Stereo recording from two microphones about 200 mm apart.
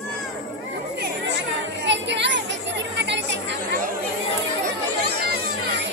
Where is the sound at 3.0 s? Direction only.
65° right (ahead or behind).